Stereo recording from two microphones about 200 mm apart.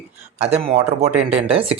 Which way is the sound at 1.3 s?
30° right (ahead or behind).